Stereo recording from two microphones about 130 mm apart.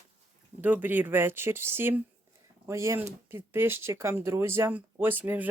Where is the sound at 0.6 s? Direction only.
15° right (ahead or behind).